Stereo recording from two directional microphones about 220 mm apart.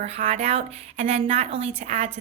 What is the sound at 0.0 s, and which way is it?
A woman's voice, 30° right (ahead or behind).